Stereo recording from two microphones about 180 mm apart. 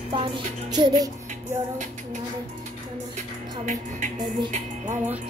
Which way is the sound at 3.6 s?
45° right (ahead or behind).